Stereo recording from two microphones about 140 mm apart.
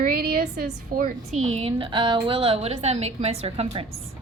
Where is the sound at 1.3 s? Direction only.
50° right (ahead or behind).